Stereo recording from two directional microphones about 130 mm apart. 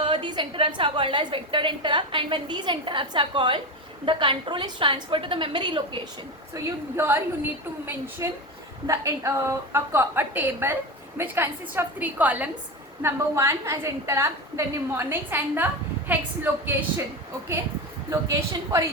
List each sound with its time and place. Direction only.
0.0 s a woman's voice: 40° right (ahead or behind)
6.5 s a woman's voice: 25° right (ahead or behind)
8.2 s a woman's voice: 25° right (ahead or behind)
18.1 s a woman's voice: 25° right (ahead or behind)